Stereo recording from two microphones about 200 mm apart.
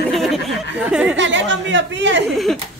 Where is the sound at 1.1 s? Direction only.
65° right (ahead or behind).